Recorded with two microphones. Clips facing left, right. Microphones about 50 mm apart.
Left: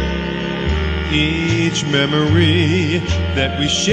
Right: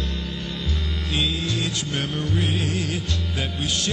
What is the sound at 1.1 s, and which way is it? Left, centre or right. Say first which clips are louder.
Music: left 8 dB; left.